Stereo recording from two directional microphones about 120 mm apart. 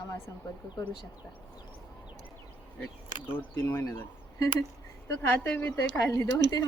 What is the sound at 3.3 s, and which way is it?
A woman's voice, 20° left (ahead or behind).